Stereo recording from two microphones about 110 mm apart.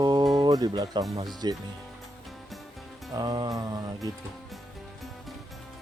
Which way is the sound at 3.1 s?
35° right (ahead or behind).